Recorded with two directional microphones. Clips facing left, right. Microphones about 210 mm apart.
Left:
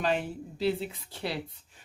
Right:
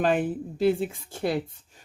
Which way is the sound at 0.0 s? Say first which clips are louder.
Right 6 dB; 50° right (ahead or behind).